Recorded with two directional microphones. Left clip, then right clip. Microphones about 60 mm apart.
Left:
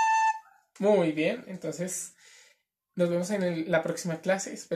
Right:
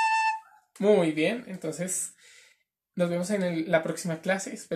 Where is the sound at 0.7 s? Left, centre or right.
Left.